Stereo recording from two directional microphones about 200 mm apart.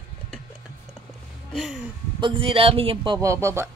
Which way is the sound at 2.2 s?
25° right (ahead or behind).